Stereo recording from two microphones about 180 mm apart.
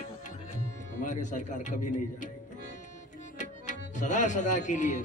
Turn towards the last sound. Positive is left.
turn(degrees=45)  # may be behind; listen again after turning